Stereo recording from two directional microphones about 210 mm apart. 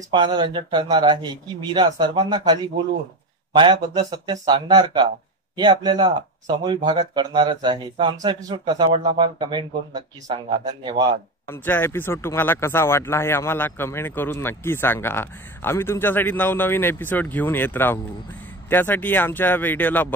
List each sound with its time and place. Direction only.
0.1 s speech: 20° right (ahead or behind)
11.4 s speech: 10° left (ahead or behind)